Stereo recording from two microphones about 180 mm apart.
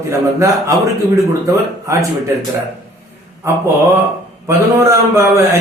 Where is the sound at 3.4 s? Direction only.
15° right (ahead or behind).